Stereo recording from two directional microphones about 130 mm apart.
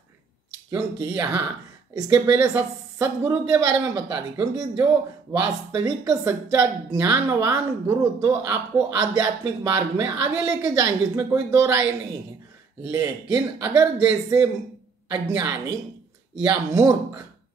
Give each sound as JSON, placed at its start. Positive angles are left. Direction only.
{"t": 0.7, "sound": "speech", "side_deg": -20}
{"t": 12.9, "sound": "speech", "side_deg": -20}